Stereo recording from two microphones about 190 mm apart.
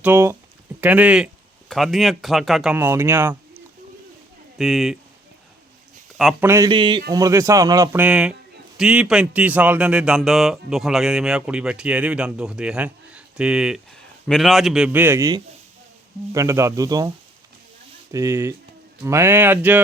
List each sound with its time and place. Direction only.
0.0 s speech: 10° right (ahead or behind)
4.5 s speech: centre (ahead or behind)
6.4 s speech: 15° right (ahead or behind)
6.7 s speech: 25° right (ahead or behind)
8.0 s speech: 5° right (ahead or behind)
18.1 s speech: 15° right (ahead or behind)